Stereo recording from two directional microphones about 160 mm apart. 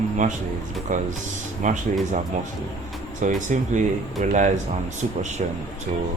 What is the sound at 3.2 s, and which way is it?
Speech, 50° right (ahead or behind).